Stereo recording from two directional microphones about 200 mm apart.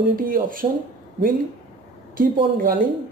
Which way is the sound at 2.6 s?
45° right (ahead or behind).